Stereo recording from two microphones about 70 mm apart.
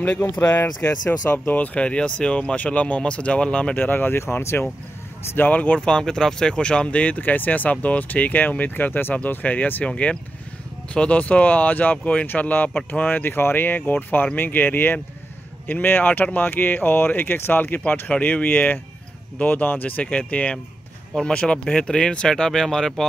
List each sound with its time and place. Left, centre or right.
0.0 s speech: left
3.8 s speech: left
5.3 s speech: left; by 23.0 s centre